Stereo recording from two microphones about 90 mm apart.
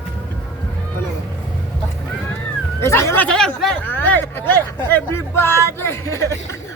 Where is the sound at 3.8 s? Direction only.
20° left (ahead or behind).